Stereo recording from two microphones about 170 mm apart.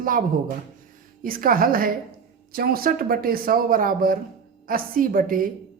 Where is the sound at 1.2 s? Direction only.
55° right (ahead or behind).